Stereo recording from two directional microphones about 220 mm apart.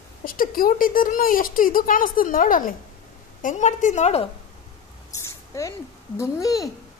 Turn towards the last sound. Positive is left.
turn(degrees=15)  # may be behind; listen again after turning